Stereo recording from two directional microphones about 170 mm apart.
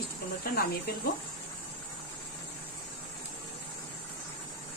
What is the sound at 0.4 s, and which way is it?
Speech, 60° left (ahead or behind).